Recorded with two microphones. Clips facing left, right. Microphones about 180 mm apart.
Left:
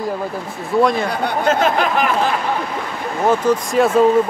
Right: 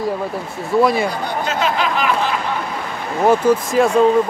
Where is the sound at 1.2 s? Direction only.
50° left (ahead or behind).